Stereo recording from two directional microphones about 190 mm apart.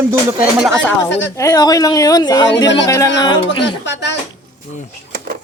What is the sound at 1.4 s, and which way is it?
Speech, 15° left (ahead or behind).